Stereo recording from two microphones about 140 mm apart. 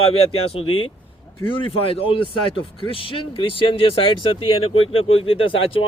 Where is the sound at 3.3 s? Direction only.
40° left (ahead or behind).